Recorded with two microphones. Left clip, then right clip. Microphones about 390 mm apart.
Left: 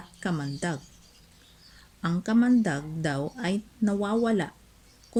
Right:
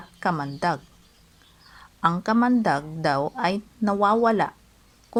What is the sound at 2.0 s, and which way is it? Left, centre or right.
Speech, centre.